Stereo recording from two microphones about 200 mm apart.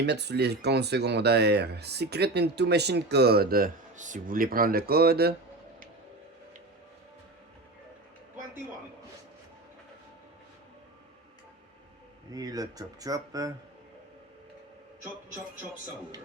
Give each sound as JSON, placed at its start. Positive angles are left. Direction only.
{"t": 0.0, "sound": "speech", "side_deg": -55}
{"t": 12.3, "sound": "speech", "side_deg": -20}